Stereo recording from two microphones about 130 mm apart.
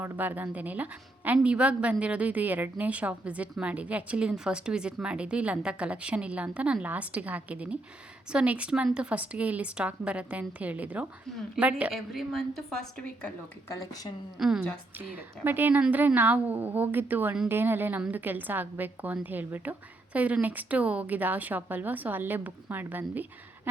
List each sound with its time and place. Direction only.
0.0 s a woman's voice: 15° right (ahead or behind)
11.9 s a woman's voice: centre (ahead or behind)
13.7 s speech: 30° left (ahead or behind)
14.3 s a woman's voice: 5° right (ahead or behind)
14.9 s a woman's voice: 15° right (ahead or behind)